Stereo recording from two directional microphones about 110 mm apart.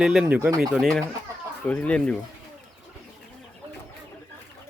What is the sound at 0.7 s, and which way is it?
Speech, 5° left (ahead or behind).